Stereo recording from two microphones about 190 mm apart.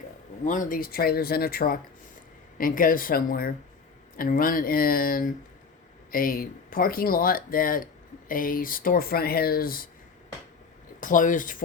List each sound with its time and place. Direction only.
0.4 s speech: 45° left (ahead or behind)
11.0 s speech: 45° left (ahead or behind)